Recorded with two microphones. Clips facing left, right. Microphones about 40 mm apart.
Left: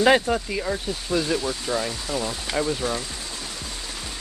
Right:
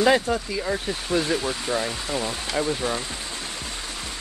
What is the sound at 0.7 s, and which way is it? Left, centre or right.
Speech, right.